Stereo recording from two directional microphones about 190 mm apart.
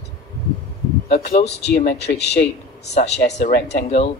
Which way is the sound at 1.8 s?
60° left (ahead or behind).